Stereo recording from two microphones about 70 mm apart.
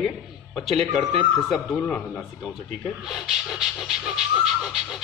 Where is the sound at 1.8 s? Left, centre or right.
Centre.